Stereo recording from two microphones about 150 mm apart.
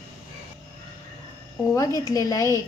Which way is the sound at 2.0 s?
20° left (ahead or behind).